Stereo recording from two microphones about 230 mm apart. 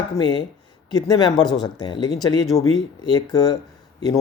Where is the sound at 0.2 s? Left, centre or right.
Centre.